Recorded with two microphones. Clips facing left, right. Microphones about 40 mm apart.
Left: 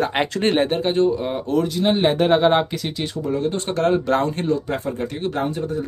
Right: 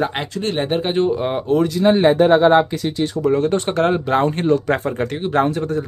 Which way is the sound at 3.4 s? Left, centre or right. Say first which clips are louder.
Right 5 dB; right.